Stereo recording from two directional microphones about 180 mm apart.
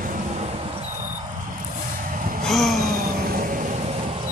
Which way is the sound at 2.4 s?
Centre (ahead or behind).